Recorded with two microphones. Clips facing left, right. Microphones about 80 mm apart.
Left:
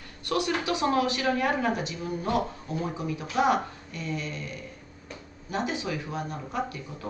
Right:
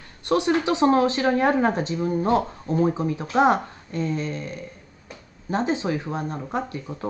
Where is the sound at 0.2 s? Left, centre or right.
Right.